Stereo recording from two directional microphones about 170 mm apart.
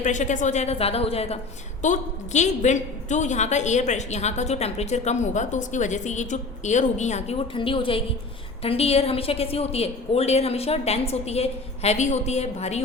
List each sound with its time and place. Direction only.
0.0 s a woman's voice: 45° left (ahead or behind)